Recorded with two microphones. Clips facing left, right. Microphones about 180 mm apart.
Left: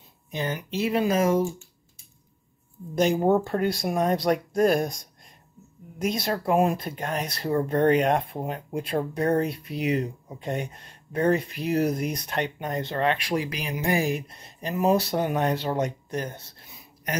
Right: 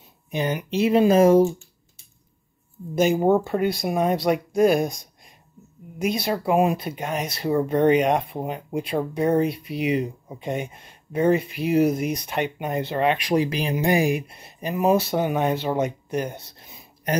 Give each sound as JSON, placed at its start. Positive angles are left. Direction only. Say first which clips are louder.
{"t": 0.3, "sound": "speech", "louder": "right 5 dB", "side_deg": -15}
{"t": 3.0, "sound": "speech", "louder": "right 2 dB", "side_deg": -5}
{"t": 13.9, "sound": "speech", "louder": "right 4 dB", "side_deg": -15}